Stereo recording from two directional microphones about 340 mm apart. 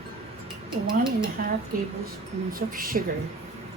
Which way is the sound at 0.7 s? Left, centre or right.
Centre.